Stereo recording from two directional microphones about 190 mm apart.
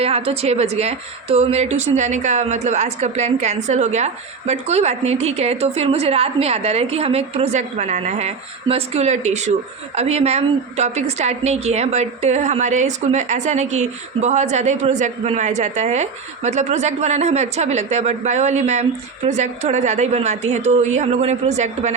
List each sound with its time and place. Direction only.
0.0 s a woman's voice: 30° right (ahead or behind)